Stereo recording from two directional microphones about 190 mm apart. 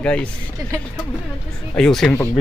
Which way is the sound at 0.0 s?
5° left (ahead or behind).